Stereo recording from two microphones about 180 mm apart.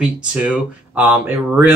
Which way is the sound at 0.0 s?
5° right (ahead or behind).